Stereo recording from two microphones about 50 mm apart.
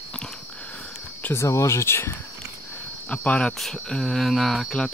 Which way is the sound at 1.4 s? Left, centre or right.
Left.